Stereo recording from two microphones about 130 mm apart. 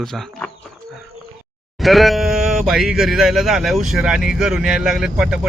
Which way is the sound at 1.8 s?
Centre (ahead or behind).